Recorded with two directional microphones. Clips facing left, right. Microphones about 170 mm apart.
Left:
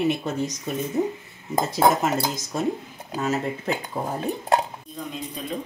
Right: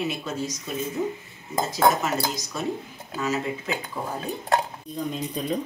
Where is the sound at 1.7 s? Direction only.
50° left (ahead or behind).